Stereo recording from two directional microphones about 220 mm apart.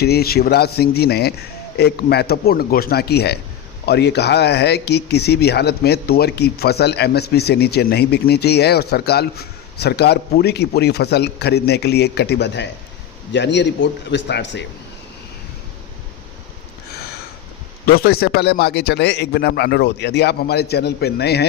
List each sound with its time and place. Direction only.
0.0 s speech: 45° left (ahead or behind)
17.8 s speech: 45° left (ahead or behind)